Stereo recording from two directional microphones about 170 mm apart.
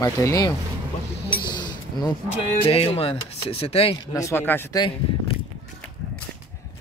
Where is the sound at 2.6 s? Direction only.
35° left (ahead or behind).